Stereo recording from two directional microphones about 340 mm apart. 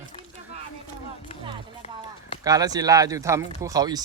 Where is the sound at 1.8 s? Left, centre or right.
Centre.